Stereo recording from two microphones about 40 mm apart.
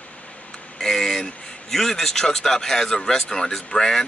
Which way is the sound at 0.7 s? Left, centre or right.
Centre.